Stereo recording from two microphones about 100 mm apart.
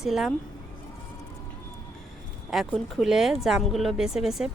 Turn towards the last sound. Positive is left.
turn(degrees=-5)  # may be behind; listen again after turning